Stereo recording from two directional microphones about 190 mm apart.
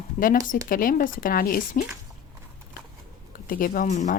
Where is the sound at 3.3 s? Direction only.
50° left (ahead or behind).